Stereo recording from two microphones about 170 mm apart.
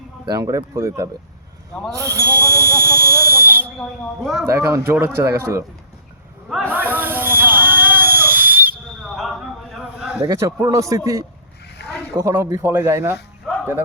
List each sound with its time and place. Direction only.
0.3 s a man's voice: 20° right (ahead or behind)
3.8 s speech: centre (ahead or behind)
4.4 s speech: 15° right (ahead or behind)
6.5 s snake: 5° left (ahead or behind)
6.7 s a sound: 10° right (ahead or behind)
9.0 s a sound: centre (ahead or behind)
10.2 s a man's voice: 20° right (ahead or behind)
11.8 s zipper: 75° left (ahead or behind)
12.1 s speech: 15° right (ahead or behind)